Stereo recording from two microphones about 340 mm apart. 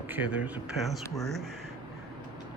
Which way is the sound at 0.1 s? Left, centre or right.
Centre.